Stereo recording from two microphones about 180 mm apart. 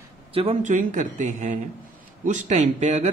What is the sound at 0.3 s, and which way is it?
Speech, 30° right (ahead or behind).